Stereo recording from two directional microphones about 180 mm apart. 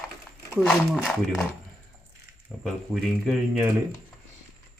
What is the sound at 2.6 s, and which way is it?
Speech, centre (ahead or behind).